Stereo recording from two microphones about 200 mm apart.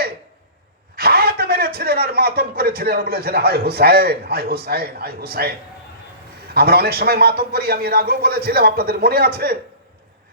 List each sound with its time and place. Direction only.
0.9 s a man's voice: 50° right (ahead or behind)